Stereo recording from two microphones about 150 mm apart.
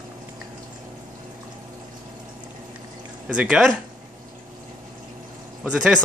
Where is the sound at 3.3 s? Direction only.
5° right (ahead or behind).